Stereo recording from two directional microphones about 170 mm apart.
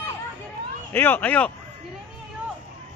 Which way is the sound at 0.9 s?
10° left (ahead or behind).